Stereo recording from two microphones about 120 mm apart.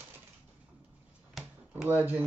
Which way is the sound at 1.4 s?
Centre (ahead or behind).